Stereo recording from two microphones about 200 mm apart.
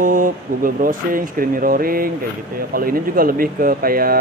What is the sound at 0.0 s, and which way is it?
Speech, 40° right (ahead or behind).